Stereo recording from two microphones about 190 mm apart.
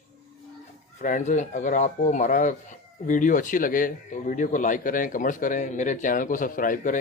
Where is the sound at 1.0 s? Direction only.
40° left (ahead or behind).